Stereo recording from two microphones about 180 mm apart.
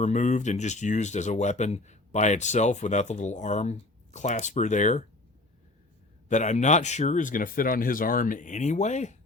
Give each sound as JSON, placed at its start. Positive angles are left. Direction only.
{"t": 0.0, "sound": "speech", "side_deg": 40}
{"t": 6.2, "sound": "speech", "side_deg": 40}